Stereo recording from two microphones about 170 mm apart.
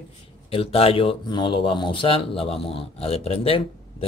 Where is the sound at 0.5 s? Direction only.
35° left (ahead or behind).